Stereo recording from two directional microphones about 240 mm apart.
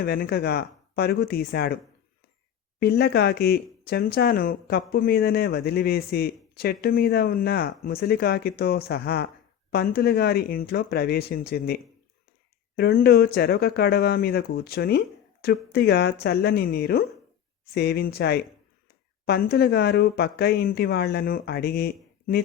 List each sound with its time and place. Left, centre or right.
0.0 s speech: left
2.8 s speech: left